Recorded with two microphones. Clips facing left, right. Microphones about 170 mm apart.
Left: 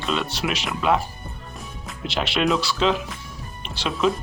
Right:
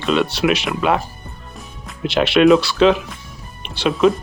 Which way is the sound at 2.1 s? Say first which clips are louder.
Right 10 dB; 65° right (ahead or behind).